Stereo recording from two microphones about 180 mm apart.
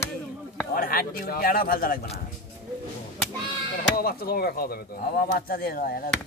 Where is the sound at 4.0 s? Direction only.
60° left (ahead or behind).